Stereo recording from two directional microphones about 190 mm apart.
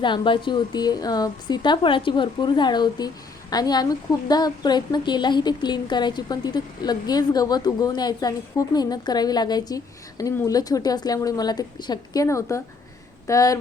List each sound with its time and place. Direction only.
0.0 s a woman's voice: 25° left (ahead or behind)